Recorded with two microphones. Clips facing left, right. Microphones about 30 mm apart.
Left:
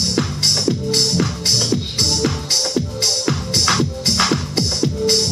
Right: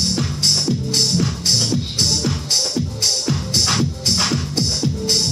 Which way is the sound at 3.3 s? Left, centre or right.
Centre.